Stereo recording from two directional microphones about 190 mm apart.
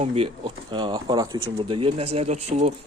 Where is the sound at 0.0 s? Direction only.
30° right (ahead or behind).